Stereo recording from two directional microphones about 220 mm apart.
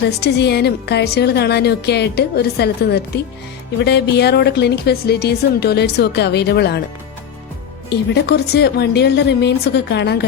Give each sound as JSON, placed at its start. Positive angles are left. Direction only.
{"t": 0.2, "sound": "a woman's voice", "side_deg": 50}
{"t": 7.9, "sound": "a woman's voice", "side_deg": 45}